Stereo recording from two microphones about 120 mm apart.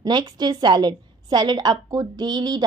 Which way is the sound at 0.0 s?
35° right (ahead or behind).